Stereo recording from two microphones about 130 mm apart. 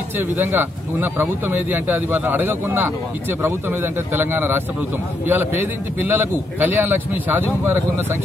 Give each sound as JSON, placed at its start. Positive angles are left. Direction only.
{"t": 0.2, "sound": "speech", "side_deg": -15}